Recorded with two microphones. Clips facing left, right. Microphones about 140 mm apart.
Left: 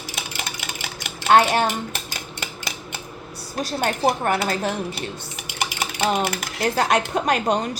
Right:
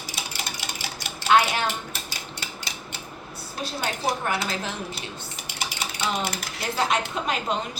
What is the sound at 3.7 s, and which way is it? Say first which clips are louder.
Speech: left 6 dB; 50° left (ahead or behind).